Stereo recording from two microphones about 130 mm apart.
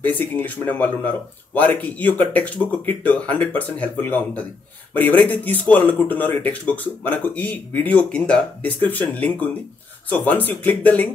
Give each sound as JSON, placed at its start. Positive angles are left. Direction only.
{"t": 0.0, "sound": "speech", "side_deg": 15}